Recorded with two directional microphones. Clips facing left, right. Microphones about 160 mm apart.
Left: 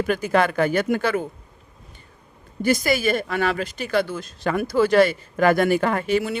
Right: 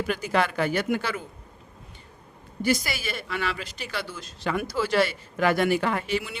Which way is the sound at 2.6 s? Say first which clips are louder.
Left 6 dB; 50° left (ahead or behind).